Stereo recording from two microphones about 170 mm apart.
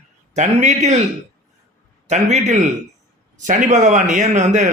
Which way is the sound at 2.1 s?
40° right (ahead or behind).